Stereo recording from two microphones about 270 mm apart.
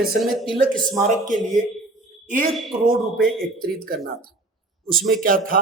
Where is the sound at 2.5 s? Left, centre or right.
Centre.